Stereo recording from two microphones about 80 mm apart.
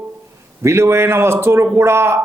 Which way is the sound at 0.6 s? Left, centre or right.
Right.